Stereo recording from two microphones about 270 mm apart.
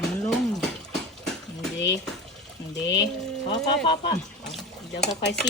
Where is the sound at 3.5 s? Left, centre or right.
Centre.